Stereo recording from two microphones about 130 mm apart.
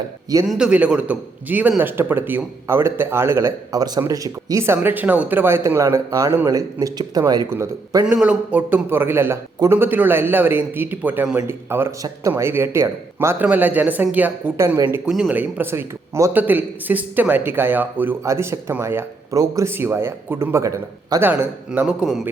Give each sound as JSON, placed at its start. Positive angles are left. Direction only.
{"t": 0.4, "sound": "speech", "side_deg": -5}
{"t": 8.0, "sound": "speech", "side_deg": -10}